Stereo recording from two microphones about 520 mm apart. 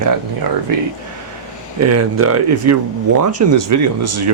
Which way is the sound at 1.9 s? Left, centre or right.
Right.